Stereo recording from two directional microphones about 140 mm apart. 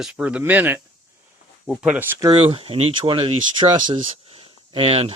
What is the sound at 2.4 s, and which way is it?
Speech, 40° right (ahead or behind).